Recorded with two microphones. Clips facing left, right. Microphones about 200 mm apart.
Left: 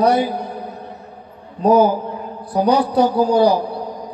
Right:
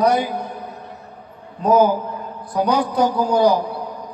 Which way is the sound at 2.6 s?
35° left (ahead or behind).